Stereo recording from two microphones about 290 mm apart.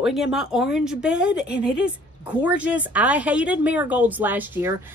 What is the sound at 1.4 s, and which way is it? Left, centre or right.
Speech, left.